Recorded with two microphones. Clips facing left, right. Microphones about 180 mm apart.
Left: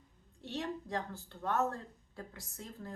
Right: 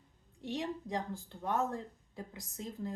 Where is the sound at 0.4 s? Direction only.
15° right (ahead or behind).